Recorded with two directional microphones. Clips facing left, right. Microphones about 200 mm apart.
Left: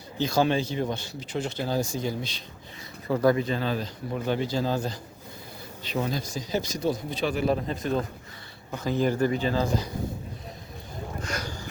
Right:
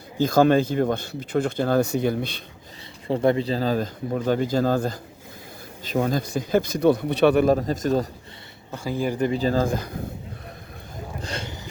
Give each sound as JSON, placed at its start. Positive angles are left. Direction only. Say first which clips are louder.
{"t": 0.2, "sound": "speech", "louder": "right 6 dB", "side_deg": -50}
{"t": 3.1, "sound": "speech", "louder": "right 2 dB", "side_deg": -25}
{"t": 7.4, "sound": "speech", "louder": "right 6 dB", "side_deg": -45}
{"t": 8.7, "sound": "speech", "louder": "left 1 dB", "side_deg": -10}
{"t": 9.3, "sound": "speech", "louder": "right 4 dB", "side_deg": -40}
{"t": 11.2, "sound": "boat", "louder": "right 1 dB", "side_deg": -30}